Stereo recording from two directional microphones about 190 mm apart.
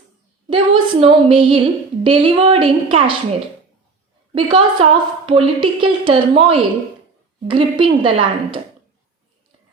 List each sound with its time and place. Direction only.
0.5 s a sound: 30° right (ahead or behind)
2.0 s a woman's voice: 30° right (ahead or behind)
4.3 s a woman's voice: 30° right (ahead or behind)